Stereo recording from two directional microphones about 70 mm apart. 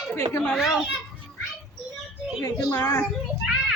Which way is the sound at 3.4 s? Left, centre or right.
Centre.